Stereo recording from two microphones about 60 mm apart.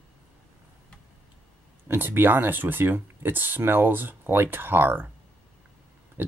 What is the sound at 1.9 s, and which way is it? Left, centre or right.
Speech, right.